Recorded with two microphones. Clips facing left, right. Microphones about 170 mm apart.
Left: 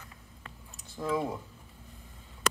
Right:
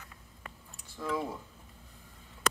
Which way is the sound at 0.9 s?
20° left (ahead or behind).